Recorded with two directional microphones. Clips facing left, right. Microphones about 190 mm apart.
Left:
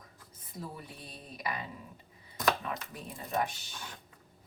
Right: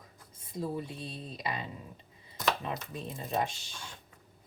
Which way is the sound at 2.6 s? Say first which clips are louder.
Right 2 dB; 25° right (ahead or behind).